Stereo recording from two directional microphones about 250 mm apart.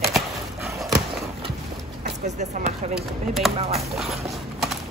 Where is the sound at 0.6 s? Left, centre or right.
Centre.